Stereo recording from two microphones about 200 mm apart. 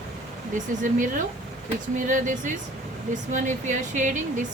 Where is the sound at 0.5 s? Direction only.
40° right (ahead or behind).